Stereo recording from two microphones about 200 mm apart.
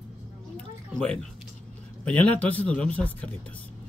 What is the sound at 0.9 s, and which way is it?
Speech, 5° left (ahead or behind).